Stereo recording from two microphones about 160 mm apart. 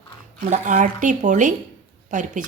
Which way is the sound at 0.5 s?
55° right (ahead or behind).